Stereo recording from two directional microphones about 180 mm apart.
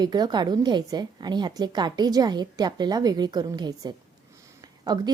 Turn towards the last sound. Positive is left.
turn(degrees=-20)  # may be behind; listen again after turning